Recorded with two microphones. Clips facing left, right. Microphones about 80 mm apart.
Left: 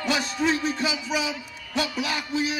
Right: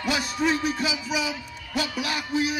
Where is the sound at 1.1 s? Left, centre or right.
Centre.